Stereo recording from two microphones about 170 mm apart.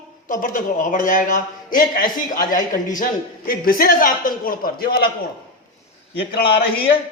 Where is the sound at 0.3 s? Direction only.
55° left (ahead or behind).